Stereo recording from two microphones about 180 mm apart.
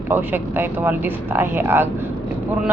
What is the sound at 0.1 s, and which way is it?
Speech, 10° right (ahead or behind).